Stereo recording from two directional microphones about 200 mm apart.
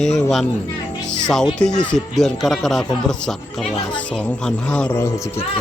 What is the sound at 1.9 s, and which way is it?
A man's voice, centre (ahead or behind).